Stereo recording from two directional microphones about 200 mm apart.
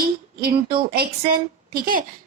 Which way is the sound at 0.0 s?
50° right (ahead or behind).